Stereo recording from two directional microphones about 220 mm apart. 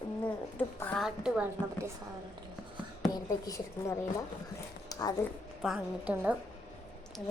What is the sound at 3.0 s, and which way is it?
Speech, 15° left (ahead or behind).